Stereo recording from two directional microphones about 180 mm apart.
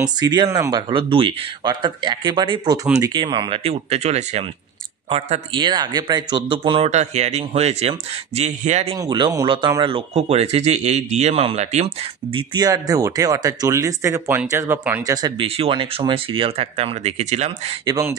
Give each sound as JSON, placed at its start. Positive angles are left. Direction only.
{"t": 0.2, "sound": "speech", "side_deg": -20}
{"t": 8.9, "sound": "speech", "side_deg": -25}
{"t": 15.1, "sound": "speech", "side_deg": -20}
{"t": 15.4, "sound": "speech", "side_deg": -35}
{"t": 17.8, "sound": "speech", "side_deg": -15}